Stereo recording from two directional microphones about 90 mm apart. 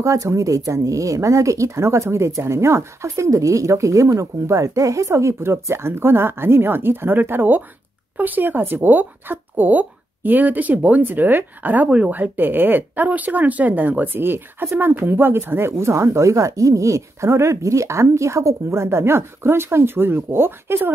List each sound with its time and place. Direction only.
0.0 s a woman's voice: 35° right (ahead or behind)